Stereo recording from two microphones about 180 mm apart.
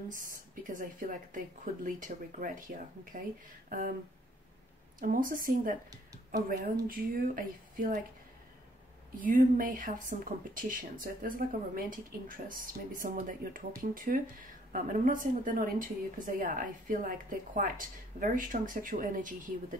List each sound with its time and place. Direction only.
0.1 s a woman's voice: 50° right (ahead or behind)
5.0 s a woman's voice: 50° right (ahead or behind)
6.9 s a woman's voice: 50° right (ahead or behind)
9.2 s a woman's voice: 50° right (ahead or behind)